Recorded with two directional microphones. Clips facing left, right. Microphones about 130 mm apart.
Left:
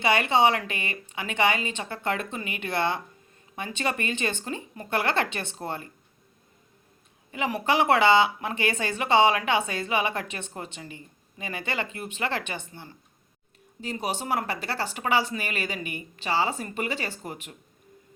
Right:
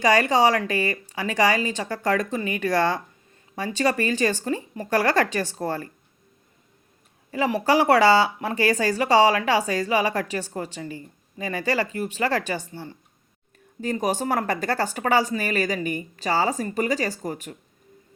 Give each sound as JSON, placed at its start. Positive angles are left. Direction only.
{"t": 0.0, "sound": "speech", "side_deg": -40}
{"t": 5.6, "sound": "speech", "side_deg": 20}
{"t": 7.3, "sound": "speech", "side_deg": -35}